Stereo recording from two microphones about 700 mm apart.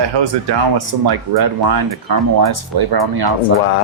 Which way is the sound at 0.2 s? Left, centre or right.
Right.